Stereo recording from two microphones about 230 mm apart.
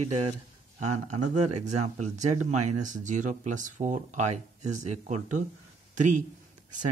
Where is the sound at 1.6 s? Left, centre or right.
Right.